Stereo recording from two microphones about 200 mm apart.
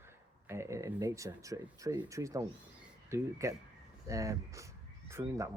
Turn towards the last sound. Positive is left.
turn(degrees=-15)  # may be behind; listen again after turning